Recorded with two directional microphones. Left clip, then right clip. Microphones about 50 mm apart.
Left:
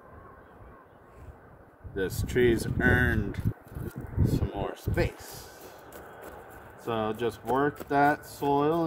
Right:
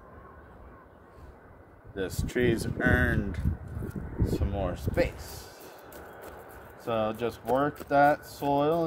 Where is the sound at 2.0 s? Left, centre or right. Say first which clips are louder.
Left 3 dB; right.